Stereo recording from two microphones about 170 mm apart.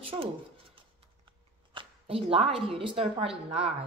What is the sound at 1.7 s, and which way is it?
A woman's voice, 35° right (ahead or behind).